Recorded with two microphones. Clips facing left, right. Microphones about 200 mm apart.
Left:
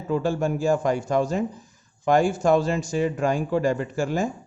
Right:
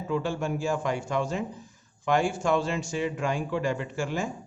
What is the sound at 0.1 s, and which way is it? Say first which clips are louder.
Speech: left 5 dB; 40° left (ahead or behind).